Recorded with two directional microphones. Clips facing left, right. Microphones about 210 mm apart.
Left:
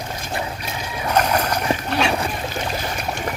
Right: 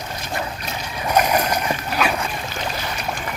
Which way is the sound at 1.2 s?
10° right (ahead or behind).